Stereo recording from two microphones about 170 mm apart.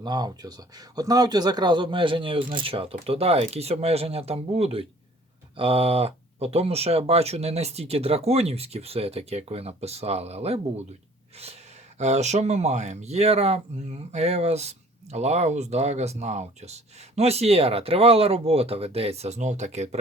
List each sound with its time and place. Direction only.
0.0 s speech: 25° right (ahead or behind); by 20.0 s 40° right (ahead or behind)